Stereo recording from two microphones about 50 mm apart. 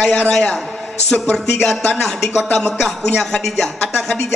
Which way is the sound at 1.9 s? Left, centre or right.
Centre.